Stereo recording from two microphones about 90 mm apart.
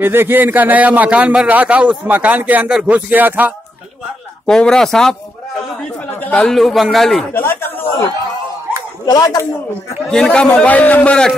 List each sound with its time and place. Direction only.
0.0 s speech: 25° right (ahead or behind)
4.5 s a man's voice: 5° left (ahead or behind)
6.3 s a man's voice: 5° left (ahead or behind)
7.3 s speech: 25° left (ahead or behind)
9.0 s speech: 45° left (ahead or behind)
10.1 s a man's voice: 10° left (ahead or behind)